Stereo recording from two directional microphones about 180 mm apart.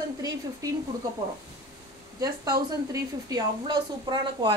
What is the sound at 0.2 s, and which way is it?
Stir, 20° right (ahead or behind).